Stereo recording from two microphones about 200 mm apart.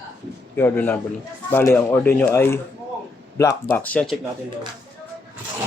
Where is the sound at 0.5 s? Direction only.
10° left (ahead or behind).